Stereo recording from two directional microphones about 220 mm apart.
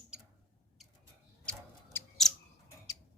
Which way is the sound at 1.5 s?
5° left (ahead or behind).